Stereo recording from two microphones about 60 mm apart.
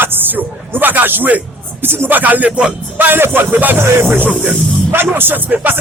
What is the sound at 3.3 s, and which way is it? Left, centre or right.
Speech, right.